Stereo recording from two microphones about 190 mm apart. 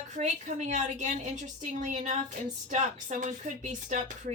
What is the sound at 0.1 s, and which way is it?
Speech, 40° right (ahead or behind).